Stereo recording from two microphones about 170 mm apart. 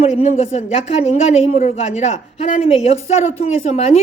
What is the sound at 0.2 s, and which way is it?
A woman's voice, 40° left (ahead or behind).